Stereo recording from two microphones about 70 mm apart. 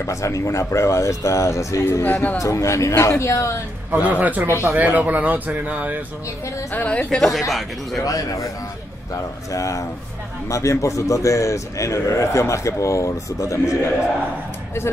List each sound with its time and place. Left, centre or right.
0.0 s a man's voice: left
2.0 s a woman's voice: left
2.3 s a man's voice: left
3.9 s speech: right
6.7 s a woman's voice: left
7.2 s speech: centre
8.0 s a man's voice: left